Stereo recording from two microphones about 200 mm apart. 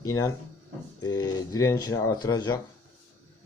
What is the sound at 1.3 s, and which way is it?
Speech, 20° left (ahead or behind).